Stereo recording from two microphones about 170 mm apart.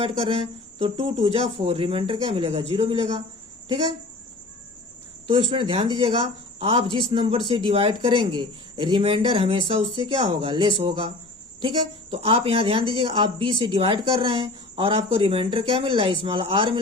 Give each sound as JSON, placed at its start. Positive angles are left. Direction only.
{"t": 0.8, "sound": "speech", "side_deg": -30}
{"t": 5.3, "sound": "speech", "side_deg": -30}
{"t": 12.1, "sound": "speech", "side_deg": -30}